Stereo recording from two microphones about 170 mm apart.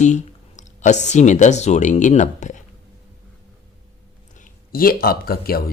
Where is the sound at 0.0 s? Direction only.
45° left (ahead or behind).